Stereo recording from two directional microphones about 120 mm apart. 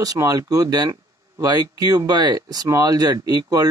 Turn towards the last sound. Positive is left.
turn(degrees=-30)  # may be behind; listen again after turning